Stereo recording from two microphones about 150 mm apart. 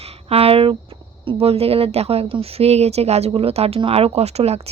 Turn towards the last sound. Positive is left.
turn(degrees=-45)  # may be behind; listen again after turning